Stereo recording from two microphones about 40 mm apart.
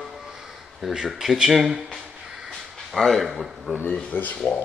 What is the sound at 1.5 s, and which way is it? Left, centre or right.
Speech, centre.